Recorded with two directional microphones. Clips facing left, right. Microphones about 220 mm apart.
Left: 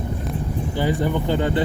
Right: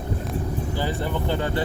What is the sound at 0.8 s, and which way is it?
Speech, 15° left (ahead or behind).